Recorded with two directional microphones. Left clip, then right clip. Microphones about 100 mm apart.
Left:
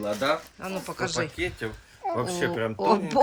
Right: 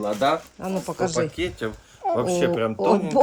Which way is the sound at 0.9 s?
30° right (ahead or behind).